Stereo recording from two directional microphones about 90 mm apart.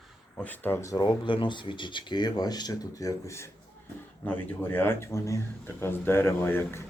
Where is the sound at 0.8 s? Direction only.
40° left (ahead or behind).